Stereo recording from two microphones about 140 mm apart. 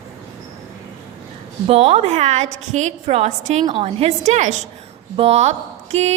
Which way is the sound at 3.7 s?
45° right (ahead or behind).